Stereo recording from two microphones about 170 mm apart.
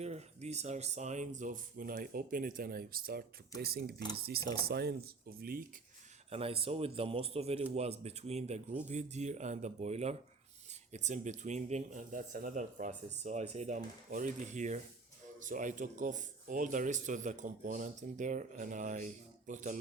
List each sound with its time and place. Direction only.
0.0 s speech: 40° right (ahead or behind); by 5.6 s 60° right (ahead or behind)
6.3 s a man's voice: 35° right (ahead or behind)